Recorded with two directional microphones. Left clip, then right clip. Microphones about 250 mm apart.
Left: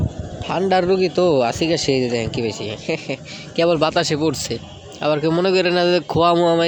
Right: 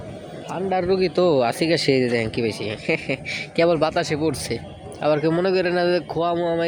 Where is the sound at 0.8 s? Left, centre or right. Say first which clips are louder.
Left 3 dB; centre.